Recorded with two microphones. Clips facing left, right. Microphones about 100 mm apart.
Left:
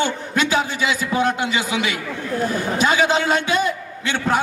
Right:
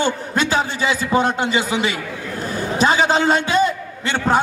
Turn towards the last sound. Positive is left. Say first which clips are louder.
# right 3 dB
turn(degrees=-45)  # may be behind; listen again after turning